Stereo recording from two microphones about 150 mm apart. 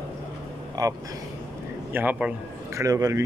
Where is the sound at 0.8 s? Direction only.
25° right (ahead or behind).